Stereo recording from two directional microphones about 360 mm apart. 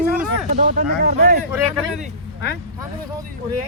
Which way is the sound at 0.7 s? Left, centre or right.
Right.